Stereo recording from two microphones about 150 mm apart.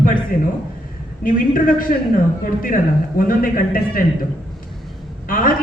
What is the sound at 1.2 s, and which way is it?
Speech, 70° left (ahead or behind).